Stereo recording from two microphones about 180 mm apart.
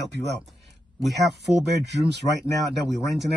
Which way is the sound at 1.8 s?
70° right (ahead or behind).